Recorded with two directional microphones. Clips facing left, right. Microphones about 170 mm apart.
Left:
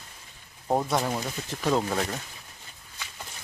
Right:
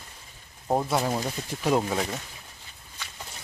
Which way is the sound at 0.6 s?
5° right (ahead or behind).